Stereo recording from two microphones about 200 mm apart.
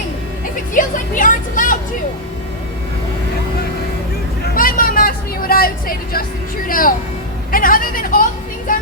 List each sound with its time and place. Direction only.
0.7 s speech: 40° left (ahead or behind)
4.5 s vehicle: 45° left (ahead or behind)
6.7 s a woman's voice: 45° left (ahead or behind)